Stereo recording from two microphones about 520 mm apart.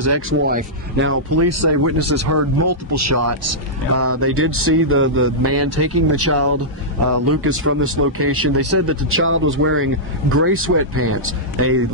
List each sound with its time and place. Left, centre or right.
0.0 s speech: right